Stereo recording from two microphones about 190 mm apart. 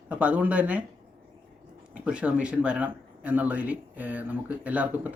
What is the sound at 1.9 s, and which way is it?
Speech, 5° right (ahead or behind).